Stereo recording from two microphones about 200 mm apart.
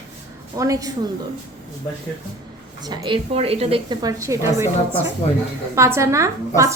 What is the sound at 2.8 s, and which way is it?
A woman's voice, 25° right (ahead or behind).